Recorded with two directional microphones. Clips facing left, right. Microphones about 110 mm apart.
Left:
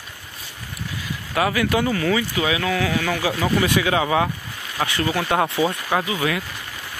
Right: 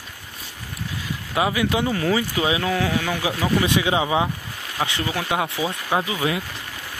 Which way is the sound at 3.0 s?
15° right (ahead or behind).